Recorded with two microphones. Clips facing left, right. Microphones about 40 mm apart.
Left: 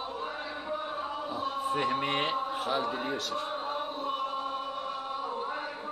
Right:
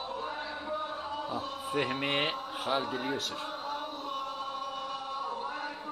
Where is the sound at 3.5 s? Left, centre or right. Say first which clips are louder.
Left 3 dB; left.